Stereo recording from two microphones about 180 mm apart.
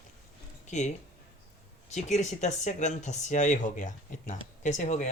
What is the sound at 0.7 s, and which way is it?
Speech, 40° left (ahead or behind).